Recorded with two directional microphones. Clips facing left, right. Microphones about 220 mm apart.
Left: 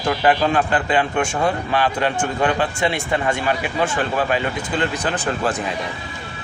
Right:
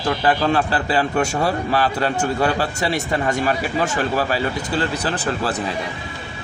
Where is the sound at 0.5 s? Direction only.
35° right (ahead or behind).